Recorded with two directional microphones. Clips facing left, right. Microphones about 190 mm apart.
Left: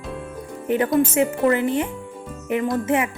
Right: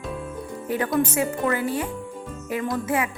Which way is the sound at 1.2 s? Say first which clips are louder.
Left 5 dB; 20° left (ahead or behind).